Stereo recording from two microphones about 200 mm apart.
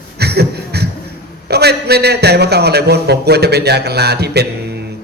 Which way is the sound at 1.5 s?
55° right (ahead or behind).